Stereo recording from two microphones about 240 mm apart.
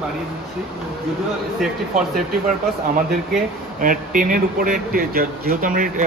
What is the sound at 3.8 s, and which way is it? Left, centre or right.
Speech, right.